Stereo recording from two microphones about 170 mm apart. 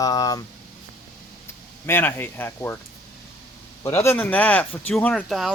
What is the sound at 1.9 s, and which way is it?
Speech, 10° left (ahead or behind).